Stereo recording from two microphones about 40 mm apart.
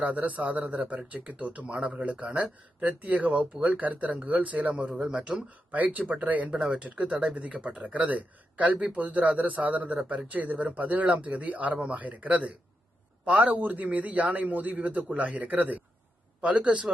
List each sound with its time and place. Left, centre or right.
0.0 s speech: right
1.6 s speech: right
4.9 s speech: right
5.7 s speech: right
6.5 s speech: right
16.4 s speech: right